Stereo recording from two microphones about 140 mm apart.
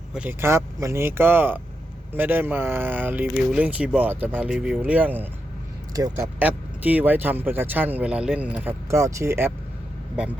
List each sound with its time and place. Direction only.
0.1 s speech: 10° right (ahead or behind)
5.9 s speech: 25° right (ahead or behind)
6.4 s speech: 10° right (ahead or behind)